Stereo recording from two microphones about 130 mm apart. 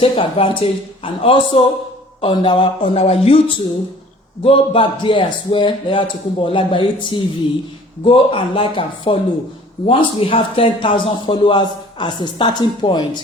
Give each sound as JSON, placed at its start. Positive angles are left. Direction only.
{"t": 0.0, "sound": "a man's voice", "side_deg": 40}
{"t": 4.4, "sound": "a man's voice", "side_deg": 45}